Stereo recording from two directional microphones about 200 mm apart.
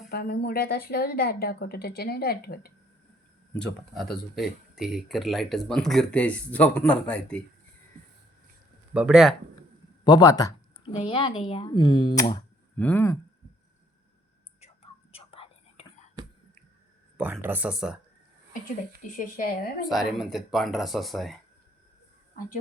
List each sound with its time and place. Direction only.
0.1 s speech: 50° left (ahead or behind)
3.5 s speech: 5° left (ahead or behind)
8.9 s speech: 5° right (ahead or behind)
10.0 s a woman's voice: 20° left (ahead or behind)
12.7 s speech: 10° left (ahead or behind)
15.1 s whispering: 30° left (ahead or behind)
17.2 s speech: 5° right (ahead or behind)
19.2 s speech: 45° left (ahead or behind)
19.9 s speech: centre (ahead or behind)